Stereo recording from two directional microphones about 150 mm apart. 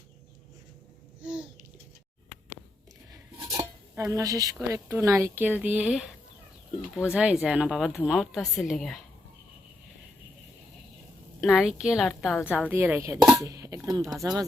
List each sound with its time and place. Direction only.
3.1 s a sound: 25° right (ahead or behind)
4.7 s a woman's voice: 20° right (ahead or behind); by 9.0 s centre (ahead or behind)
11.3 s a woman's voice: centre (ahead or behind)
12.5 s speech: 10° right (ahead or behind)
13.4 s a sound: 25° right (ahead or behind)
14.1 s speech: 25° right (ahead or behind)